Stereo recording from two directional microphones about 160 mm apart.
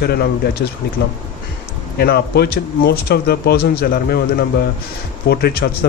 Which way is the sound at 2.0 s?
90° left.